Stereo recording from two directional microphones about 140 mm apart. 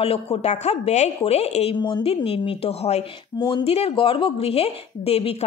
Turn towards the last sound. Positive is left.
turn(degrees=45)  # may be behind; listen again after turning